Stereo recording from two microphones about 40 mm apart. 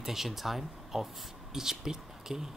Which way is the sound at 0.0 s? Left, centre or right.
Centre.